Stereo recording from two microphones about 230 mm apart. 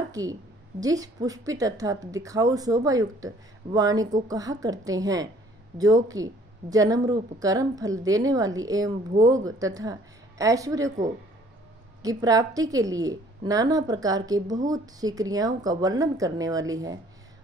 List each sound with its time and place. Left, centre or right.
0.1 s a woman's voice: centre
12.0 s a woman's voice: centre